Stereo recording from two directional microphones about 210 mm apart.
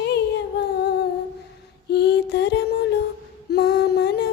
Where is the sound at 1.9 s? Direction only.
55° left (ahead or behind).